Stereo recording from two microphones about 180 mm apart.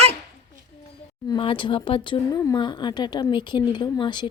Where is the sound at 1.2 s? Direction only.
25° left (ahead or behind).